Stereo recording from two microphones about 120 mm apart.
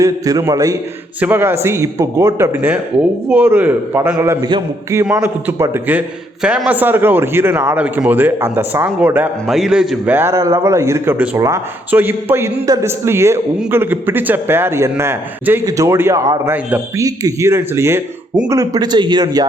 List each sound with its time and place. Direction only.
0.0 s a man's voice: 30° right (ahead or behind)
1.2 s a man's voice: 15° right (ahead or behind)
10.1 s a man's voice: 20° right (ahead or behind)